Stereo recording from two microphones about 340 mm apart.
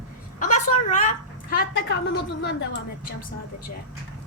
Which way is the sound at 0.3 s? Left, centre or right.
Left.